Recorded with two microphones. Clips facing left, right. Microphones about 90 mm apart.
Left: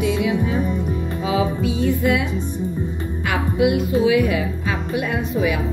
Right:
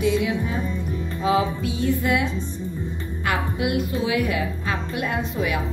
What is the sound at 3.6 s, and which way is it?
A woman's voice, 20° left (ahead or behind).